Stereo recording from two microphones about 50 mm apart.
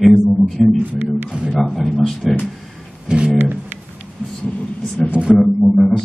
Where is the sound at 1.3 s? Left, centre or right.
Centre.